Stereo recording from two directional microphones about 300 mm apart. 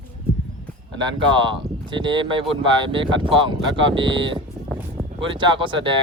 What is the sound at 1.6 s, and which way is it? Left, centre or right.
Speech, centre.